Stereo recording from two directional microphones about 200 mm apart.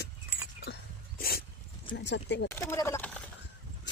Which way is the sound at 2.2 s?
60° left (ahead or behind).